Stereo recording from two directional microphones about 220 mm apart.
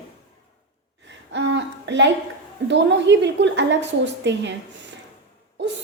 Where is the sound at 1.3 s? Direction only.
55° right (ahead or behind).